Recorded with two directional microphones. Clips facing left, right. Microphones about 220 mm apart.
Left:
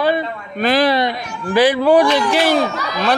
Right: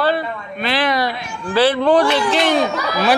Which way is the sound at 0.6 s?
45° left (ahead or behind).